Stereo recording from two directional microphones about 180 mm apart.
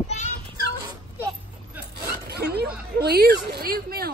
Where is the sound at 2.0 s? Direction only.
65° right (ahead or behind).